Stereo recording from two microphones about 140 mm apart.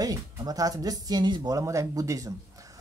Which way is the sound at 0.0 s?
25° right (ahead or behind).